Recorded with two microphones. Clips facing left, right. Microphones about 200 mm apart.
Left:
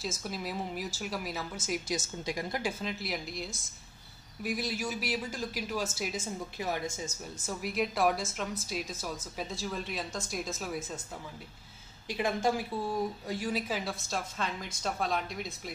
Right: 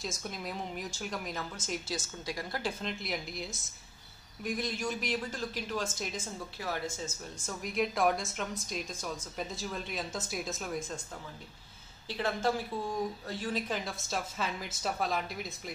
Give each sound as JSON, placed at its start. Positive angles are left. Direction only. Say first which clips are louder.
{"t": 0.0, "sound": "a woman's voice", "louder": "left 2 dB", "side_deg": 5}
{"t": 2.0, "sound": "a woman's voice", "louder": "left 3 dB", "side_deg": 20}
{"t": 2.8, "sound": "a woman's voice", "louder": "left 1 dB", "side_deg": 5}
{"t": 6.6, "sound": "a man's voice", "louder": "left 2 dB", "side_deg": 20}
{"t": 7.4, "sound": "a woman's voice", "louder": "even", "side_deg": 5}
{"t": 12.1, "sound": "a woman's voice", "louder": "left 2 dB", "side_deg": 15}